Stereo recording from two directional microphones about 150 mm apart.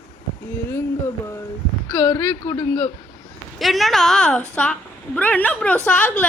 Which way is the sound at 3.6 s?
Centre (ahead or behind).